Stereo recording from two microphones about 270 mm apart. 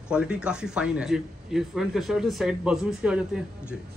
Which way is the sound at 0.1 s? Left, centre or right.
Centre.